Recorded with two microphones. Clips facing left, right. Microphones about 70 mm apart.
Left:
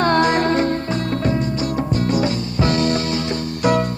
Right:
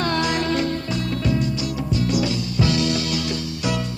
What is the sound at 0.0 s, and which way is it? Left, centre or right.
Music, left.